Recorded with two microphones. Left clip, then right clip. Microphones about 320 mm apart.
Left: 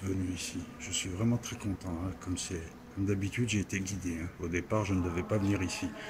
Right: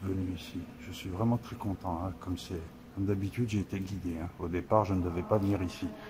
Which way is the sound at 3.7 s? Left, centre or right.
Right.